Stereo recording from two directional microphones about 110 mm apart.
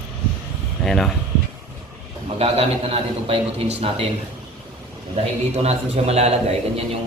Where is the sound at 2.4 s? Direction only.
65° right (ahead or behind).